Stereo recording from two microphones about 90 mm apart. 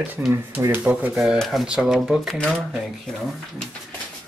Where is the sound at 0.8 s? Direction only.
15° right (ahead or behind).